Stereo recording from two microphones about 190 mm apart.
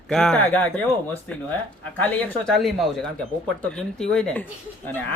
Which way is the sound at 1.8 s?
5° left (ahead or behind).